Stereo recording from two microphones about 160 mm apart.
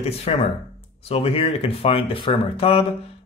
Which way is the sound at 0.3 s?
40° left (ahead or behind).